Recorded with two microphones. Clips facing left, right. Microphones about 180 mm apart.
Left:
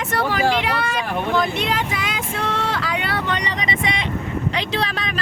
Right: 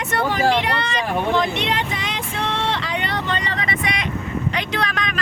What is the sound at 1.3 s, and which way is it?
Vehicle, centre (ahead or behind).